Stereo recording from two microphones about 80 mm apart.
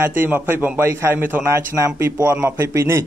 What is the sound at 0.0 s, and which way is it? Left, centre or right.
A man's voice, right.